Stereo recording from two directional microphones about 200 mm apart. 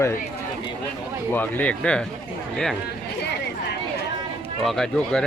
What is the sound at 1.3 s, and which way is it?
Speech, 10° left (ahead or behind).